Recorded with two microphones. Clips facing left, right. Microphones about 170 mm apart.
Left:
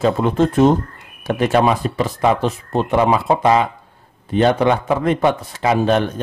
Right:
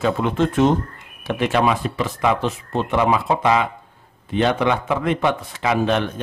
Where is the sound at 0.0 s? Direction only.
40° left (ahead or behind).